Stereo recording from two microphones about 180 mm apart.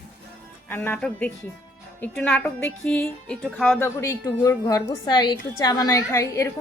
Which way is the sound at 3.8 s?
15° left (ahead or behind).